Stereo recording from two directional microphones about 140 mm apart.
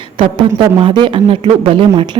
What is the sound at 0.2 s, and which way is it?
Speech, 35° right (ahead or behind).